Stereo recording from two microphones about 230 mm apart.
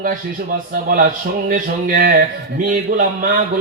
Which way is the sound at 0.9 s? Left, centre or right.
Right.